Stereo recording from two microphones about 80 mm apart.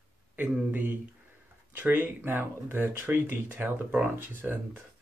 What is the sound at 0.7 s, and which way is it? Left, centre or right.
Speech, right.